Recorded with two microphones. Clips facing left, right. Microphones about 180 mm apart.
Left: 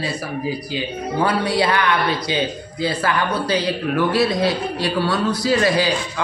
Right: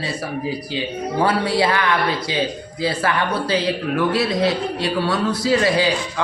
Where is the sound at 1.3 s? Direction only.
25° right (ahead or behind).